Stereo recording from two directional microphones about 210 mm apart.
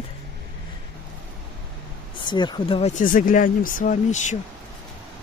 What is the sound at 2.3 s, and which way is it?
Speech, 20° left (ahead or behind).